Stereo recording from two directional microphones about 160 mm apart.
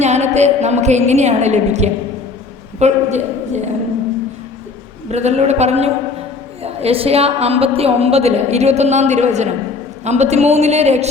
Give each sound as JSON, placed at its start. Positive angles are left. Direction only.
{"t": 0.0, "sound": "a woman's voice", "side_deg": -45}
{"t": 5.1, "sound": "a woman's voice", "side_deg": -45}